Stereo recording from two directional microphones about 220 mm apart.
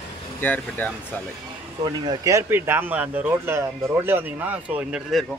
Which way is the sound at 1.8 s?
15° right (ahead or behind).